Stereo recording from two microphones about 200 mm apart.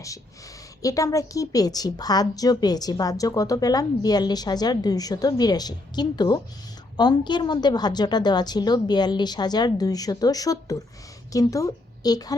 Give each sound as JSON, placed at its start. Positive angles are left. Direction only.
{"t": 0.8, "sound": "a woman's voice", "side_deg": 15}